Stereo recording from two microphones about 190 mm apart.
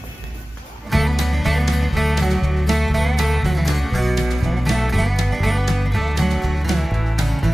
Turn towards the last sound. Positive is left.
turn(degrees=0)  # may be behind; listen again after turning